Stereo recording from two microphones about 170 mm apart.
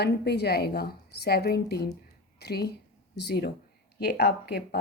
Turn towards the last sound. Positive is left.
turn(degrees=70)  # may be behind; listen again after turning